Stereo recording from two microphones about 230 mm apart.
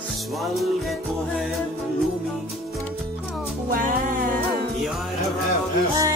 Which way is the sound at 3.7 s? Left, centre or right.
Right.